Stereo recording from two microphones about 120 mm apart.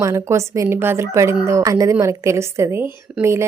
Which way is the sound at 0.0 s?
25° right (ahead or behind).